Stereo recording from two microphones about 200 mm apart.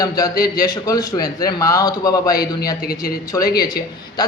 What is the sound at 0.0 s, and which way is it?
A man's voice, 20° left (ahead or behind).